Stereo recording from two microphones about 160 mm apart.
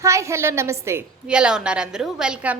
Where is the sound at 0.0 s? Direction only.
20° right (ahead or behind).